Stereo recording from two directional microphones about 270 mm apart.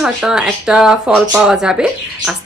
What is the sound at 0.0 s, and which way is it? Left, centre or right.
Speech, centre.